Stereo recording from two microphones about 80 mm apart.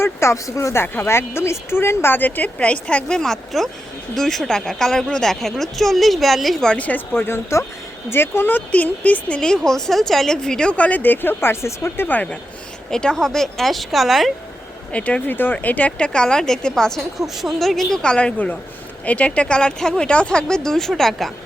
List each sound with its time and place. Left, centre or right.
0.0 s a woman's voice: left; by 6.7 s centre
6.7 s a woman's voice: centre
14.9 s speech: centre